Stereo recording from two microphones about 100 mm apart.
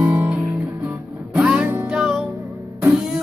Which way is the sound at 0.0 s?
15° right (ahead or behind).